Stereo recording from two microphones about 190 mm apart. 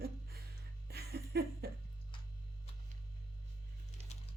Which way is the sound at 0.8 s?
55° right (ahead or behind).